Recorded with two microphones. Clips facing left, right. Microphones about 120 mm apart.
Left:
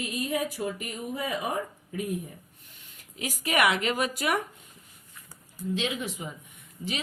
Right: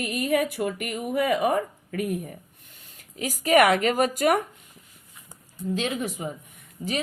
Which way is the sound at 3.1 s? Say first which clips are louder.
Right 8 dB; 40° right (ahead or behind).